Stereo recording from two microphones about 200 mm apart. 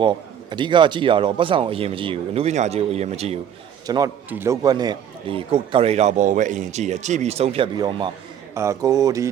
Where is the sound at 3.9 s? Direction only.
15° right (ahead or behind).